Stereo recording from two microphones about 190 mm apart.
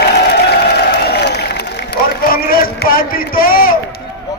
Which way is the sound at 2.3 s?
50° left (ahead or behind).